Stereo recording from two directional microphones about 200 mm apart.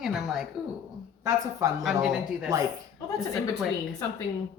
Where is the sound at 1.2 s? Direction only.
15° right (ahead or behind).